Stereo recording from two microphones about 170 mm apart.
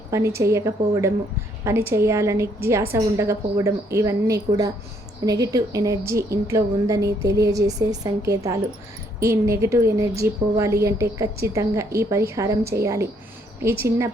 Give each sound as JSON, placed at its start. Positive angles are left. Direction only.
{"t": 0.1, "sound": "a woman's voice", "side_deg": -15}